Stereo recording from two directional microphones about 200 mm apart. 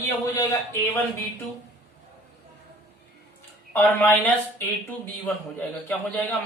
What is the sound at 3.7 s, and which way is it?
Speech, 10° left (ahead or behind).